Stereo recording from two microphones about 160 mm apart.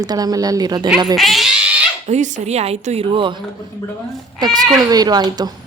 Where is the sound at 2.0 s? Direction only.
45° right (ahead or behind); by 3.4 s 30° right (ahead or behind).